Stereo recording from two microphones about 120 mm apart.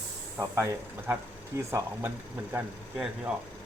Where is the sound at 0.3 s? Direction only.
25° right (ahead or behind).